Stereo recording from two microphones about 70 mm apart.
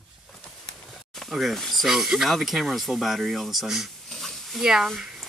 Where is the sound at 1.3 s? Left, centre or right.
Centre.